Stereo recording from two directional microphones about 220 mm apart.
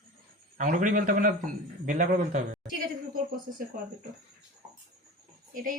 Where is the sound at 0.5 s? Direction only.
35° right (ahead or behind).